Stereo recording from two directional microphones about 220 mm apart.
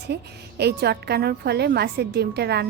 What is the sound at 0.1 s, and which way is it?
Speech, 50° right (ahead or behind).